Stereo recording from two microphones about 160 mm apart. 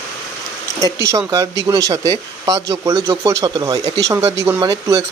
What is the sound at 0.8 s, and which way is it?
Speech, 20° right (ahead or behind).